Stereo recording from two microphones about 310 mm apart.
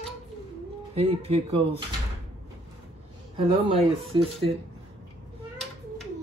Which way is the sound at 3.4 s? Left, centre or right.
Centre.